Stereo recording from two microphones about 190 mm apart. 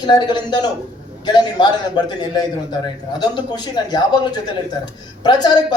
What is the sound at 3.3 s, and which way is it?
Speech, 20° left (ahead or behind).